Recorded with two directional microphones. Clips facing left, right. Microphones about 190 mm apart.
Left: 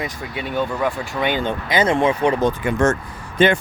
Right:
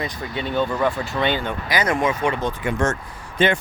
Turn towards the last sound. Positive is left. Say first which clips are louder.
# left 3 dB
turn(degrees=50)  # may be behind; listen again after turning